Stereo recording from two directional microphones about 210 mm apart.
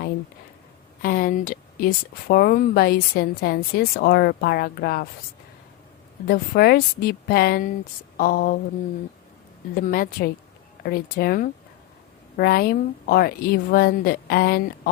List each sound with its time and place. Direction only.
1.0 s speech: 40° left (ahead or behind)
6.2 s speech: 45° left (ahead or behind)
9.7 s speech: 40° left (ahead or behind)